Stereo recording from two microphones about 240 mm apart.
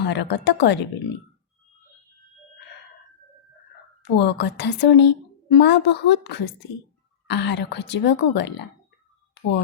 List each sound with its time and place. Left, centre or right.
0.0 s a woman's voice: left
4.0 s a woman's voice: left